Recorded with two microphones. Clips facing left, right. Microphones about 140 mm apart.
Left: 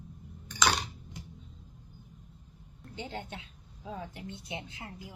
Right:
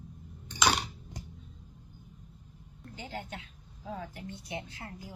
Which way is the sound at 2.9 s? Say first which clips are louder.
Left 1 dB; 25° left (ahead or behind).